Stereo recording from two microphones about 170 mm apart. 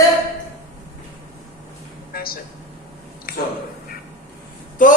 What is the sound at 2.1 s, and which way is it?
Speech, 60° left (ahead or behind).